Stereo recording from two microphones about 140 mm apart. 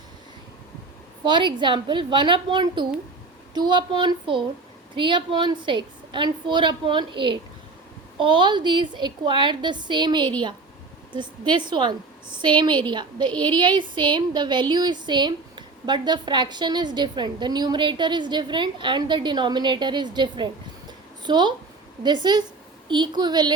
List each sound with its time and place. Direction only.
1.2 s speech: 35° right (ahead or behind)